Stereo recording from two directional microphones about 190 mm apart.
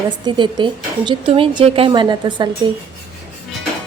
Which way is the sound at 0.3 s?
25° right (ahead or behind).